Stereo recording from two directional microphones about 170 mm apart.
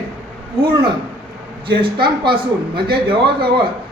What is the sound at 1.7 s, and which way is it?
A woman's voice, 30° right (ahead or behind).